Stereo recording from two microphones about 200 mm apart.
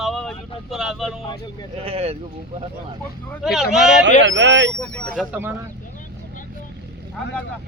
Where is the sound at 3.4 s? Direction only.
Centre (ahead or behind).